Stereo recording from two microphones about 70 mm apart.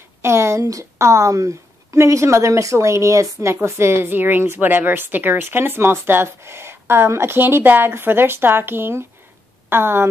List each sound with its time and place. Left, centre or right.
0.2 s a woman's voice: right